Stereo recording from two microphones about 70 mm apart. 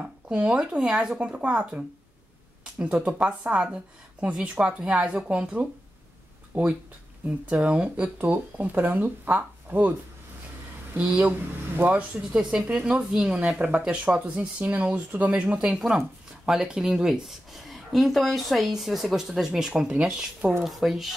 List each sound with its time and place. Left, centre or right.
0.0 s speech: centre
11.0 s speech: centre
13.7 s speech: centre
19.7 s speech: centre